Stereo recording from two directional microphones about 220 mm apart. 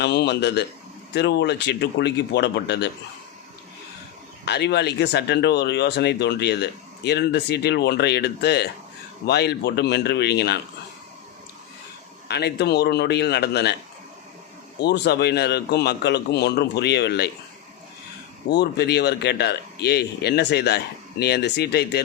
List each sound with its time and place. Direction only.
0.0 s speech: 50° left (ahead or behind)
4.4 s speech: 50° left (ahead or behind)
12.3 s speech: 50° left (ahead or behind)
14.8 s speech: 50° left (ahead or behind)
18.4 s speech: 50° left (ahead or behind)